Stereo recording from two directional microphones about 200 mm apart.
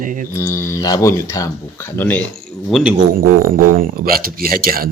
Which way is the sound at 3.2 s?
45° right (ahead or behind).